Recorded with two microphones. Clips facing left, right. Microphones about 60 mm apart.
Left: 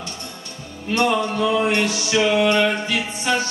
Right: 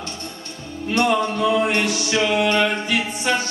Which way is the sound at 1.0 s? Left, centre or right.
Centre.